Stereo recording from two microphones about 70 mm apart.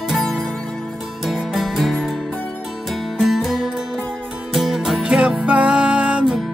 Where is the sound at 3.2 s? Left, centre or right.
Centre.